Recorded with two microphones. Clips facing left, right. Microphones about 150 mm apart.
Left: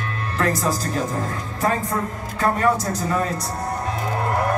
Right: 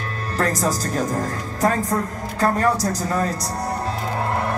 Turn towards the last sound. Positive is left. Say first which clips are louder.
# even
turn(degrees=-35)  # may be behind; listen again after turning